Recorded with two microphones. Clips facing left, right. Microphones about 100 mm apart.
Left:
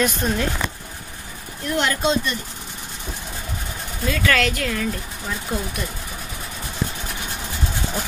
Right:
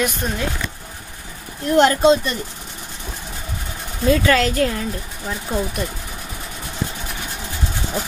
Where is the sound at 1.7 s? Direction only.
35° right (ahead or behind).